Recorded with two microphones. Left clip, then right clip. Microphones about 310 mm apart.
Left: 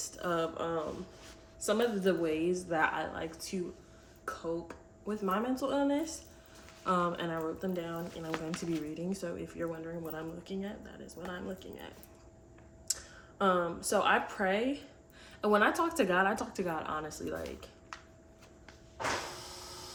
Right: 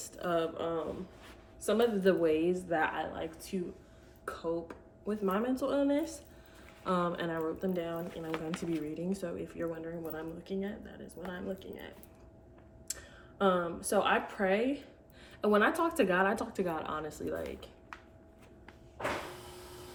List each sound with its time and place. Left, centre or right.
0.2 s speech: centre